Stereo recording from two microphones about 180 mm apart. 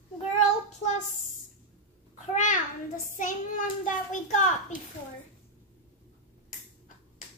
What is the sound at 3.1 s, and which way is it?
Child singing, 45° left (ahead or behind).